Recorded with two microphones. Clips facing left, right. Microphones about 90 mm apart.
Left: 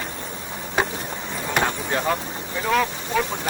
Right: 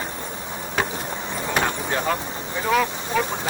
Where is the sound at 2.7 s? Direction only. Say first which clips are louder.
Even; centre (ahead or behind).